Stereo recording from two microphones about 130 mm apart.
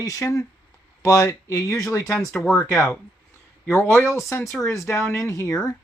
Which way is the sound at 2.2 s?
Centre (ahead or behind).